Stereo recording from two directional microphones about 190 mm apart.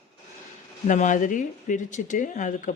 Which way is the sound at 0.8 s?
40° left (ahead or behind).